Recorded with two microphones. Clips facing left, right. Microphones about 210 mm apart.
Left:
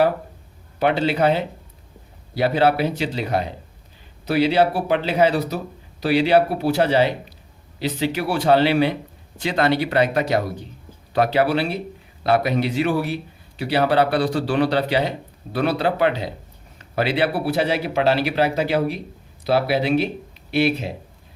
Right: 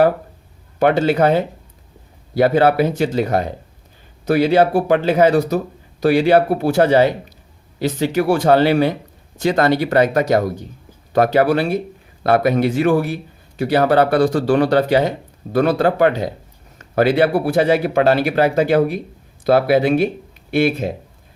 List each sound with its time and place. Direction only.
0.8 s speech: 45° right (ahead or behind)